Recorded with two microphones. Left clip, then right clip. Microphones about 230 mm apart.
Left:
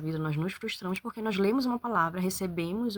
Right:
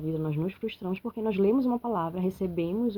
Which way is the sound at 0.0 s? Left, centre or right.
Left.